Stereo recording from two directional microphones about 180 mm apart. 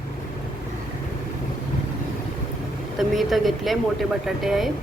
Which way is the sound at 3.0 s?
Centre (ahead or behind).